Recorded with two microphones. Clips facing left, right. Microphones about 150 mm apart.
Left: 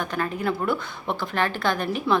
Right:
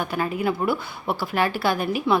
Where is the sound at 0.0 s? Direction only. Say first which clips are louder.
Right 2 dB; 10° right (ahead or behind).